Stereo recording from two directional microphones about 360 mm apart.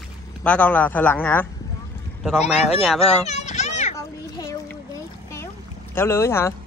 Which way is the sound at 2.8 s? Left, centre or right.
Centre.